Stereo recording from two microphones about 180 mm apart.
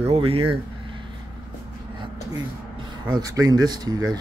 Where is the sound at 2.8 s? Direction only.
25° right (ahead or behind).